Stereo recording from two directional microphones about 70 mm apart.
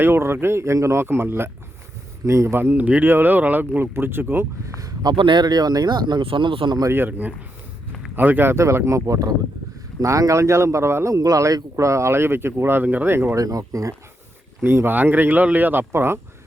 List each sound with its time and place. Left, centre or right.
0.0 s speech: right
1.0 s speech: right
2.2 s speech: right
2.6 s speech: right
4.8 s speech: right
6.9 s speech: right
11.1 s speech: right
12.8 s speech: right
13.3 s speech: right
14.6 s speech: right